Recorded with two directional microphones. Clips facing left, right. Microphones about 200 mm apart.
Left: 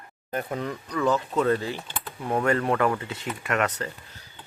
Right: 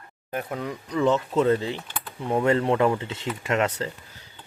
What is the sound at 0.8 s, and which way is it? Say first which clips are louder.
Speech: right 3 dB; 25° right (ahead or behind).